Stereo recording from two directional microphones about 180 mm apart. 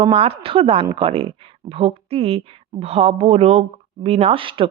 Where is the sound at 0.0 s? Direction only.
35° right (ahead or behind).